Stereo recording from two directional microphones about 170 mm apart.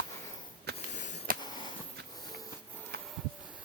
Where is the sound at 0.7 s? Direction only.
45° left (ahead or behind).